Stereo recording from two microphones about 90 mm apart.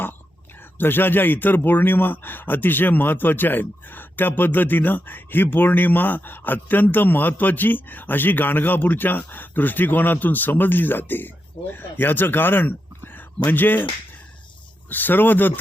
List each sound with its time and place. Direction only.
0.8 s a man's voice: 20° left (ahead or behind)
14.8 s a man's voice: 20° left (ahead or behind)